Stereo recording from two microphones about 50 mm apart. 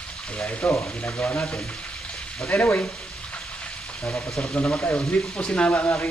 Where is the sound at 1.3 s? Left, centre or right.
Centre.